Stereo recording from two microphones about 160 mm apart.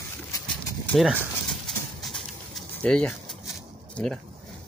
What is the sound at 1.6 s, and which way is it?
Pigeon, centre (ahead or behind).